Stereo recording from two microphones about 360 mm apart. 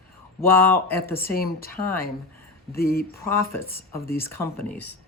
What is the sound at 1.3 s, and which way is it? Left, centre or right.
Speech, left.